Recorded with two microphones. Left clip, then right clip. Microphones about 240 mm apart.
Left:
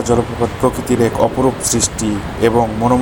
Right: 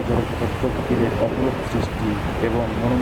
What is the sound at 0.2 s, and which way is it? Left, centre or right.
Speech, centre.